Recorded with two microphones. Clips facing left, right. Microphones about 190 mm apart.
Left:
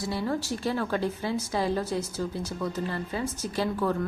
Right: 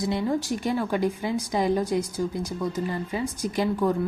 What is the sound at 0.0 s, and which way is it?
A woman's voice, 20° right (ahead or behind).